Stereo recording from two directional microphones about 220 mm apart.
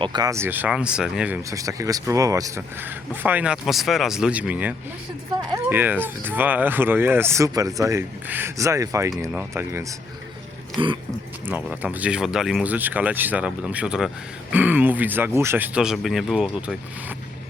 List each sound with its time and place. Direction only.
0.0 s speech: 20° right (ahead or behind)
10.8 s speech: 25° right (ahead or behind)
11.4 s speech: 10° right (ahead or behind)